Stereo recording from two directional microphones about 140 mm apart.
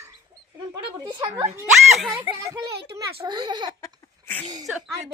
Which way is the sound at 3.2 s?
35° right (ahead or behind).